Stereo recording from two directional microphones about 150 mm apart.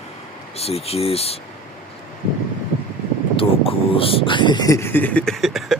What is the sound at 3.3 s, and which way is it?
Speech, 40° left (ahead or behind).